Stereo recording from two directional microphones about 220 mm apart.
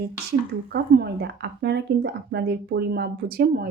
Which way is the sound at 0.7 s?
50° right (ahead or behind).